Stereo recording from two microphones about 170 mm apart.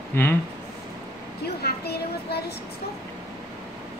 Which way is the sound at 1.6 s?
70° left (ahead or behind).